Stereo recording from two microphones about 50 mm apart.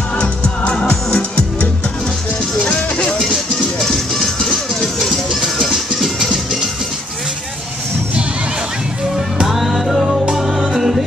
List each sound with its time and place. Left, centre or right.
0.8 s music: centre
2.7 s music: left
3.8 s music: centre
9.1 s music: centre